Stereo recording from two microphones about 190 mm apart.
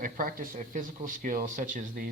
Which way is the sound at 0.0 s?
50° right (ahead or behind).